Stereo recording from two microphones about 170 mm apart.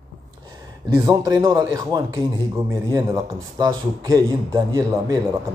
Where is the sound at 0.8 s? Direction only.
20° right (ahead or behind).